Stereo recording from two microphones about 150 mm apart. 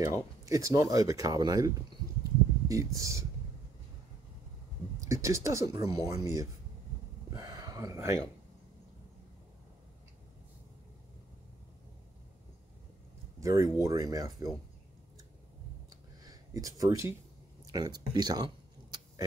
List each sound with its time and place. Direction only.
0.0 s speech: 25° right (ahead or behind)
2.7 s speech: 20° right (ahead or behind)
5.0 s speech: 20° right (ahead or behind)
7.3 s a sound: 25° right (ahead or behind)
13.4 s speech: 20° right (ahead or behind)
16.3 s speech: 25° right (ahead or behind)
17.6 s a sound: 25° right (ahead or behind)